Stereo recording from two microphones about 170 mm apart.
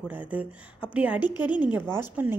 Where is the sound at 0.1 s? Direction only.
10° right (ahead or behind).